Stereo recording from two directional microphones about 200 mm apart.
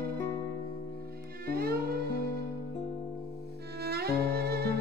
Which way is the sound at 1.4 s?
50° right (ahead or behind).